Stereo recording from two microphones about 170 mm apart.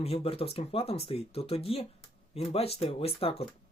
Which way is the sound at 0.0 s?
35° left (ahead or behind).